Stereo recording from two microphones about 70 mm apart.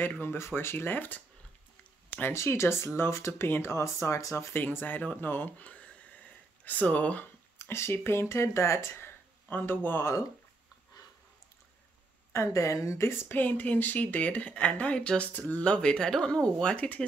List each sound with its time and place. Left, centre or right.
0.0 s speech: left
2.0 s a sound: left
2.3 s speech: left
4.6 s speech: left
7.5 s speech: left
12.5 s speech: left
13.0 s speech: left; by 17.0 s centre